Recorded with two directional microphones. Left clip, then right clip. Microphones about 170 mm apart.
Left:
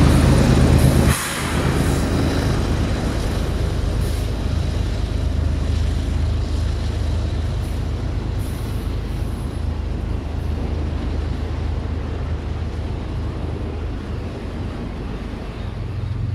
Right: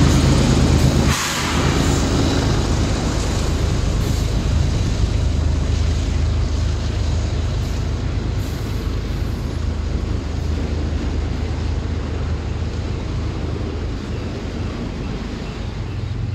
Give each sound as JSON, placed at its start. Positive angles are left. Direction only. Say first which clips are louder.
{"t": 0.0, "sound": "vehicle", "louder": "even", "side_deg": -60}